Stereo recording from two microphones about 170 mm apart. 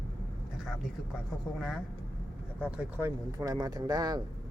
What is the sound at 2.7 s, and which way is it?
Speech, 15° right (ahead or behind).